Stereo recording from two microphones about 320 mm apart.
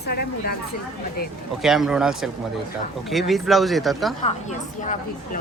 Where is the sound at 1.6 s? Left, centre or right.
Centre.